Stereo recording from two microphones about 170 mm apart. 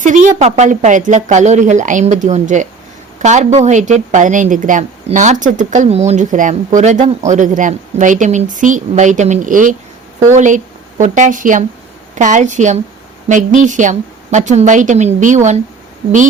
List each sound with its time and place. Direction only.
0.0 s speech: 50° right (ahead or behind)